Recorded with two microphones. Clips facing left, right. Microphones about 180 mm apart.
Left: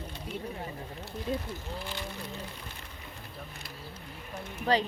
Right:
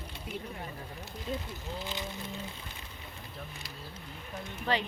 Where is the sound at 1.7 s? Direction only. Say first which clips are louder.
Right 3 dB; 20° right (ahead or behind).